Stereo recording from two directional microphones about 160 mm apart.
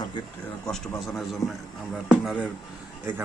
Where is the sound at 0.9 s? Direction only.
Centre (ahead or behind).